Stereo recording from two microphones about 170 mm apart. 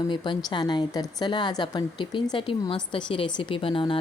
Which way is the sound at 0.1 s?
25° left (ahead or behind).